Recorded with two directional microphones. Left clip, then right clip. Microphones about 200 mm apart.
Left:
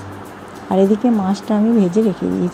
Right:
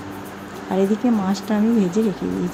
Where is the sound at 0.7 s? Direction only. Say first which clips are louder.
Left 5 dB; 15° left (ahead or behind).